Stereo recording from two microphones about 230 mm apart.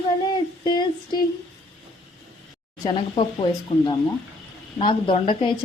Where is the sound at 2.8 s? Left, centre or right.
Left.